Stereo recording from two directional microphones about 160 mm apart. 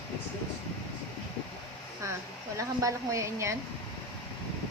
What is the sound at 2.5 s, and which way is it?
A woman's voice, 20° right (ahead or behind).